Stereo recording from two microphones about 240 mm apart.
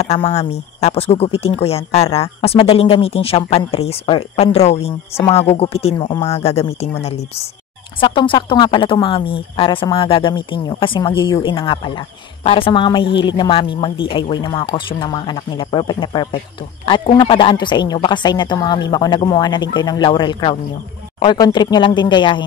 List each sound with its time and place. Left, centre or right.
0.0 s speech: left